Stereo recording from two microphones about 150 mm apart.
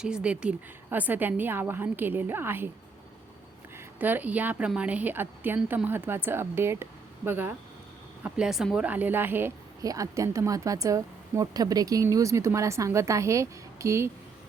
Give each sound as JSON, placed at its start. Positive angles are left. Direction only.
{"t": 0.0, "sound": "a woman's voice", "side_deg": -5}
{"t": 3.9, "sound": "a woman's voice", "side_deg": -10}
{"t": 8.2, "sound": "speech", "side_deg": -5}